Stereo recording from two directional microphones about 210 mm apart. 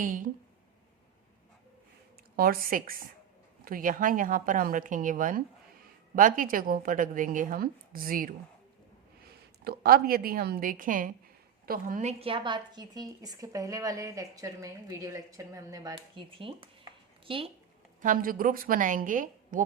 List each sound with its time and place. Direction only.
0.0 s a woman's voice: 40° right (ahead or behind)
2.3 s a woman's voice: 45° right (ahead or behind)
9.6 s a woman's voice: 45° right (ahead or behind); by 17.5 s 25° right (ahead or behind)
18.0 s a woman's voice: 40° right (ahead or behind)